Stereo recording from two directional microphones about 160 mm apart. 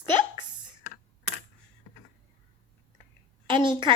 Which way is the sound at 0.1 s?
30° right (ahead or behind).